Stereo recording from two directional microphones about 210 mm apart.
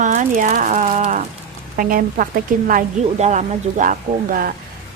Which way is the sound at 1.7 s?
40° right (ahead or behind).